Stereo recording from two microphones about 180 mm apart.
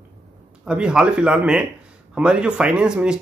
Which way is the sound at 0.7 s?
5° right (ahead or behind).